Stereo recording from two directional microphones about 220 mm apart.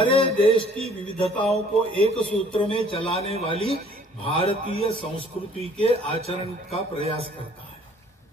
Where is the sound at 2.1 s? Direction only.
25° left (ahead or behind).